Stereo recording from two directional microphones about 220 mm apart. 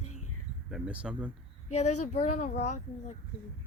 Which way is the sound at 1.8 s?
90° left.